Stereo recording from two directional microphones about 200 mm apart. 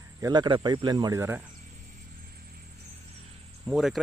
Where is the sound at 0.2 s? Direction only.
20° right (ahead or behind).